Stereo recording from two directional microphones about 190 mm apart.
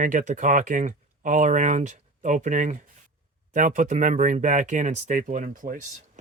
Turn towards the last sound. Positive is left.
turn(degrees=-40)  # may be behind; listen again after turning